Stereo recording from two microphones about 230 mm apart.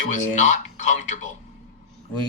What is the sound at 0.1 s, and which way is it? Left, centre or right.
Speech, left.